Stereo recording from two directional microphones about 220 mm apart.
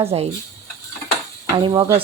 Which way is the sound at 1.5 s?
20° right (ahead or behind).